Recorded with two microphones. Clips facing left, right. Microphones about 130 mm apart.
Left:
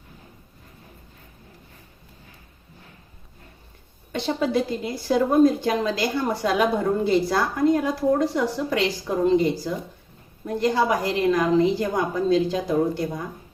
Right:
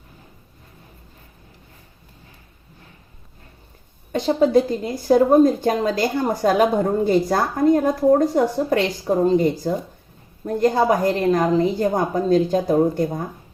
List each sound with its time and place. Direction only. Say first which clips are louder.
4.1 s a woman's voice: right 7 dB; 40° right (ahead or behind)